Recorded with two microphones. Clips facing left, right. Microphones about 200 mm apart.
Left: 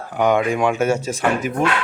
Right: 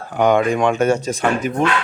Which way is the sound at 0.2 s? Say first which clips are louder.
Right 2 dB; 5° left (ahead or behind).